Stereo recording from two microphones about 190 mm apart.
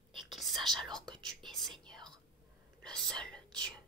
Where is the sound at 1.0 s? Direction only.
25° right (ahead or behind).